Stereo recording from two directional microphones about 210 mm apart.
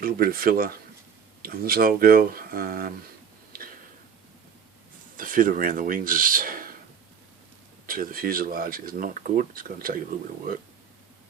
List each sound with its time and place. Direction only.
0.0 s speech: 45° right (ahead or behind)
3.5 s a sound: 45° right (ahead or behind)
5.1 s speech: 40° right (ahead or behind)
7.9 s speech: 45° right (ahead or behind)